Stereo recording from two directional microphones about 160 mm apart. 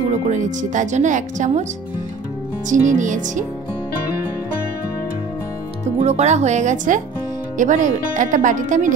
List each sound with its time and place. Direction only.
0.3 s speech: 50° right (ahead or behind)
2.7 s speech: 50° right (ahead or behind)
5.9 s speech: 45° right (ahead or behind)